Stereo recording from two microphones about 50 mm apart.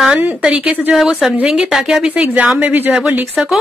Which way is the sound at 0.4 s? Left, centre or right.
Centre.